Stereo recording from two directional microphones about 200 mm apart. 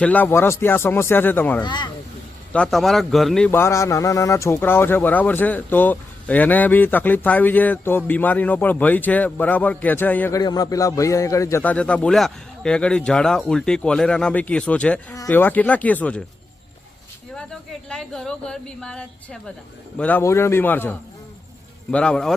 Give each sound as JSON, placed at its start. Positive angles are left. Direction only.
{"t": 0.0, "sound": "a man's voice", "side_deg": 10}
{"t": 1.6, "sound": "speech", "side_deg": 20}
{"t": 2.5, "sound": "a man's voice", "side_deg": 5}
{"t": 17.3, "sound": "a man's voice", "side_deg": 5}